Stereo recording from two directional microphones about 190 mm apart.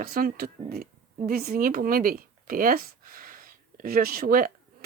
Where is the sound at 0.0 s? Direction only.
50° right (ahead or behind).